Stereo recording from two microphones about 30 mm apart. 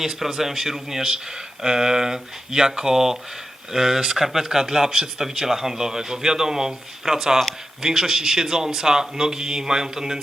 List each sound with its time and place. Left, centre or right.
0.0 s a man's voice: centre